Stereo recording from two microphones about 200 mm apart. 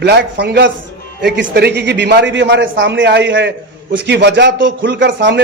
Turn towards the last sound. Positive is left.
turn(degrees=-60)  # may be behind; listen again after turning